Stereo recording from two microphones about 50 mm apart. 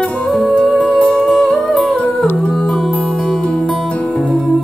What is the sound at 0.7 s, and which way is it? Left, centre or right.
Music, left.